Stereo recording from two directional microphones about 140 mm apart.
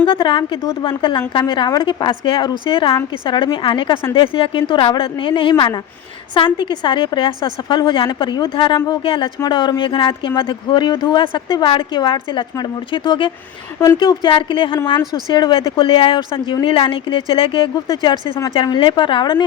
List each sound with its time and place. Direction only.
0.0 s speech: 35° left (ahead or behind)